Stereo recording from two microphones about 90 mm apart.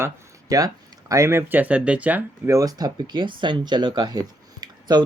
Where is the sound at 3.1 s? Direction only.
60° right (ahead or behind).